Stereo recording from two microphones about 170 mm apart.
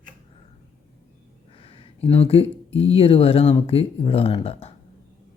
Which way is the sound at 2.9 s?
35° left (ahead or behind).